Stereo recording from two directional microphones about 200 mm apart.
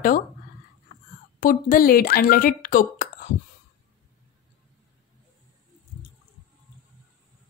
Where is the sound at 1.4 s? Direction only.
45° left (ahead or behind).